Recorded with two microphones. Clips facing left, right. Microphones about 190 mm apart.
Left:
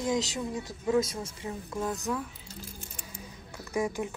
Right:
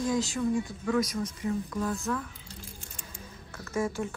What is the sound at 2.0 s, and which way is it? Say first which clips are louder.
Speech: even; 10° left (ahead or behind).